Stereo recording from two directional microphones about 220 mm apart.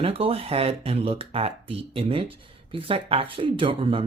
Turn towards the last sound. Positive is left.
turn(degrees=-25)  # may be behind; listen again after turning